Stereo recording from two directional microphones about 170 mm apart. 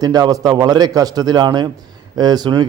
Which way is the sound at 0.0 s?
20° right (ahead or behind).